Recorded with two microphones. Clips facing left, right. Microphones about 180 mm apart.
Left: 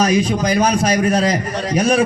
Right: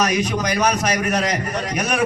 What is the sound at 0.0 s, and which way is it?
A man's voice, 30° left (ahead or behind).